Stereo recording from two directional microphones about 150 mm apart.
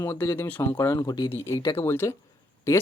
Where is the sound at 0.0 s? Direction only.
15° left (ahead or behind).